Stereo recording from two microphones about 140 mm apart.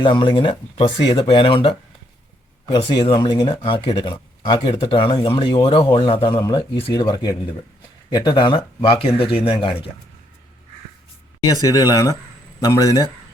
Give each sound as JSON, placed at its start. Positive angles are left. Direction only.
{"t": 0.0, "sound": "speech", "side_deg": 35}
{"t": 2.7, "sound": "speech", "side_deg": 30}
{"t": 11.5, "sound": "speech", "side_deg": 25}